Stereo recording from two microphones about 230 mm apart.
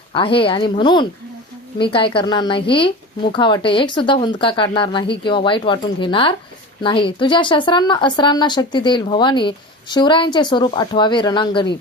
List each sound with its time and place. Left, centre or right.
0.1 s speech: left